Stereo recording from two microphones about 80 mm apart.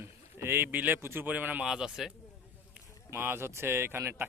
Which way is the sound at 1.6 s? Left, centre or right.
Centre.